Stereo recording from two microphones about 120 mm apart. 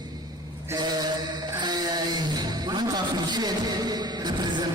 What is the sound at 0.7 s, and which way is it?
A man's voice, 35° right (ahead or behind).